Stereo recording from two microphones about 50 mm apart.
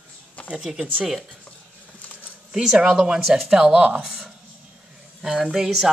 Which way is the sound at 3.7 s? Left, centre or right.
Right.